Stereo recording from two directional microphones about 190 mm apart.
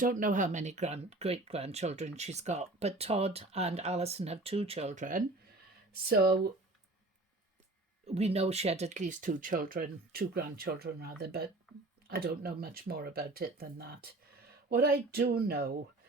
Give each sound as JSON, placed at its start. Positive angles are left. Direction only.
{"t": 0.0, "sound": "speech", "side_deg": -45}
{"t": 6.1, "sound": "speech", "side_deg": -55}
{"t": 8.0, "sound": "speech", "side_deg": -35}